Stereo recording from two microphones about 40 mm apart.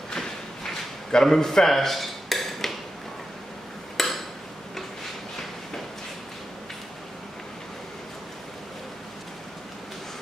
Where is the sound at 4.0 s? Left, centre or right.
Centre.